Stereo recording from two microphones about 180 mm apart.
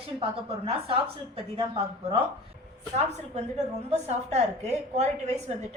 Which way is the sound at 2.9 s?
40° right (ahead or behind).